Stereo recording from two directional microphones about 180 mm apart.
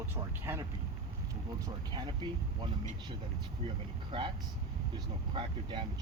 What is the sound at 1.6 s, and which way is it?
Speech, 25° right (ahead or behind).